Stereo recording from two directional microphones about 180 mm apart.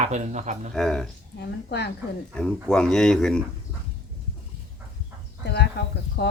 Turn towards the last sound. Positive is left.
turn(degrees=65)  # may be behind; listen again after turning